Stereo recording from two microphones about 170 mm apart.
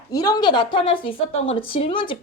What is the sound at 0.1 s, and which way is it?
A woman's voice, 20° left (ahead or behind).